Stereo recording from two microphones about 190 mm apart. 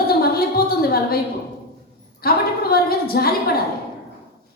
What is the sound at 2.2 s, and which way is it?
A woman's voice, 55° left (ahead or behind).